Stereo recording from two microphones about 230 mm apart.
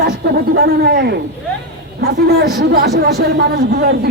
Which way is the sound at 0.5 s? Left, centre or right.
Right.